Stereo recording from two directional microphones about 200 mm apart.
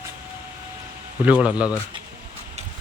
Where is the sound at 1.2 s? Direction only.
5° right (ahead or behind).